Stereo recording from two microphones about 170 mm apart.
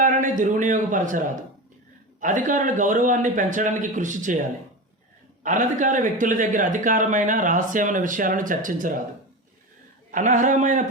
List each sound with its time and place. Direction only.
0.0 s a man's voice: 50° right (ahead or behind)
10.1 s a man's voice: 50° right (ahead or behind)